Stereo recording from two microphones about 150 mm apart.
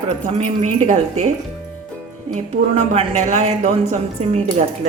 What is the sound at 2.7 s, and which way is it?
Speech, 45° right (ahead or behind).